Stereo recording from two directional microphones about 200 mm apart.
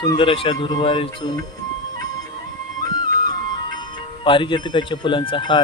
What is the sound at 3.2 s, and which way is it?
Music, 20° left (ahead or behind).